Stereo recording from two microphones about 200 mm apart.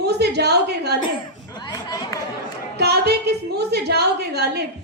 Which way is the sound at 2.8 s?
55° right (ahead or behind).